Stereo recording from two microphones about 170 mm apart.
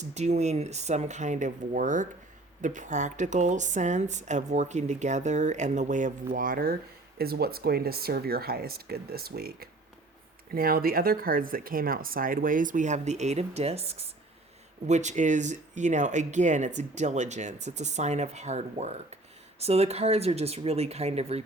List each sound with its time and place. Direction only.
0.0 s speech: 40° right (ahead or behind)